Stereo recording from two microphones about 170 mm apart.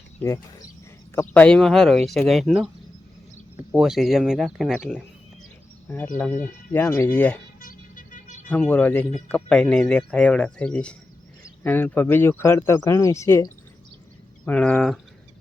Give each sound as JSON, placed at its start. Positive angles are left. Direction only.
{"t": 1.1, "sound": "speech", "side_deg": 10}
{"t": 3.7, "sound": "speech", "side_deg": -5}
{"t": 6.1, "sound": "speech", "side_deg": 10}
{"t": 7.6, "sound": "vehicle", "side_deg": 55}
{"t": 8.4, "sound": "speech", "side_deg": 10}